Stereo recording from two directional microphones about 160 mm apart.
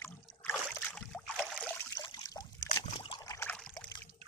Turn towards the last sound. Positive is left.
turn(degrees=5)  # may be behind; listen again after turning